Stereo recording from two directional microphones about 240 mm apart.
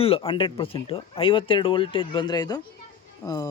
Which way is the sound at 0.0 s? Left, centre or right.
Left.